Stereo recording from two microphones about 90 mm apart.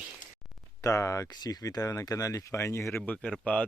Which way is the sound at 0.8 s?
35° left (ahead or behind).